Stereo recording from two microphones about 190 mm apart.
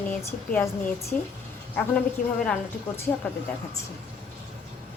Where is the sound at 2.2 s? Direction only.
45° left (ahead or behind).